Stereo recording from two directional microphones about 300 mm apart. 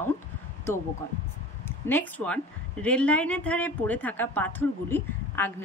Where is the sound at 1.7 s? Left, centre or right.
Centre.